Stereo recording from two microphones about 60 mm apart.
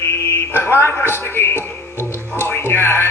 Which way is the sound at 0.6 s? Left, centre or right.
Left.